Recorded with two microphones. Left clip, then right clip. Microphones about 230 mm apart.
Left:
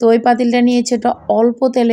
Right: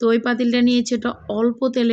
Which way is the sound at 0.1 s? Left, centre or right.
Centre.